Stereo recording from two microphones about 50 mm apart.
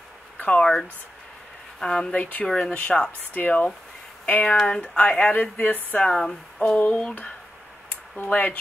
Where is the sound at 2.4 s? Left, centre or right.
Centre.